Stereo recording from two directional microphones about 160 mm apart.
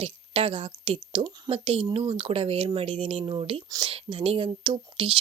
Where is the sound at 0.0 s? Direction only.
35° right (ahead or behind).